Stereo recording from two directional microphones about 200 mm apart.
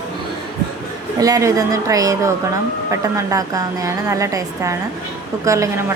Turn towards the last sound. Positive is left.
turn(degrees=-15)  # may be behind; listen again after turning